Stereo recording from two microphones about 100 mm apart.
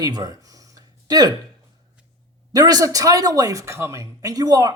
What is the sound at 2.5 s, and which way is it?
Speech, 40° right (ahead or behind).